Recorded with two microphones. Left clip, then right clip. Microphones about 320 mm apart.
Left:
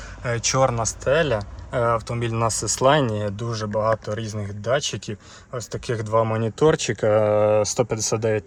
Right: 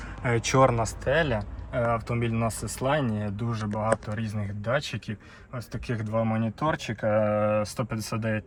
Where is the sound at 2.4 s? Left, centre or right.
Left.